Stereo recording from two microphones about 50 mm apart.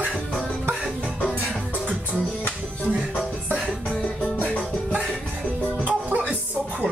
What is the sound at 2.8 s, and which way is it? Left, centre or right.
Music, right.